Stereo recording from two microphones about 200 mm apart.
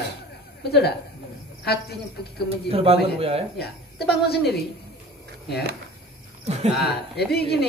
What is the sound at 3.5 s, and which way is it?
Speech, 55° left (ahead or behind).